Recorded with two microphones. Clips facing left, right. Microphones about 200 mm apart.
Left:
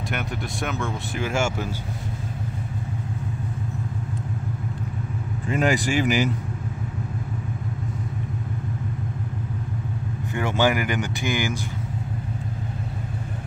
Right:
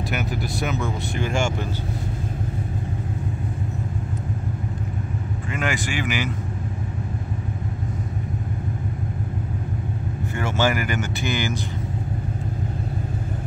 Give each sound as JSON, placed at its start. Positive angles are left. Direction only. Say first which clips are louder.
{"t": 0.1, "sound": "speech", "louder": "right 1 dB", "side_deg": 0}
{"t": 5.5, "sound": "speech", "louder": "left 5 dB", "side_deg": 35}
{"t": 10.3, "sound": "speech", "louder": "left 1 dB", "side_deg": 15}